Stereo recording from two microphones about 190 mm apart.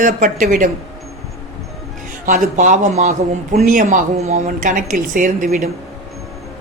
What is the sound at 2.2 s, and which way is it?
A woman's voice, 45° right (ahead or behind).